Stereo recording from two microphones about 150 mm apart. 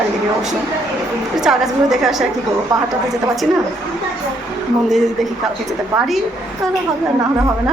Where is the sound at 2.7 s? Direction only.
25° right (ahead or behind).